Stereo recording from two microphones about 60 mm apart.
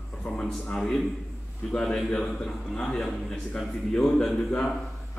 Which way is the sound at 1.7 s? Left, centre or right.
Centre.